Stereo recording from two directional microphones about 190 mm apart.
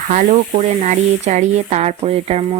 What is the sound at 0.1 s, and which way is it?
Speech, 40° right (ahead or behind).